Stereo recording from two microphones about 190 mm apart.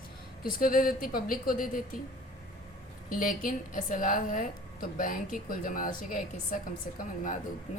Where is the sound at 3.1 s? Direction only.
45° left (ahead or behind).